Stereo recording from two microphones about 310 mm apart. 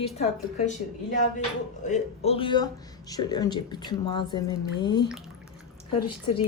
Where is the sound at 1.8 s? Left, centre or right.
Left.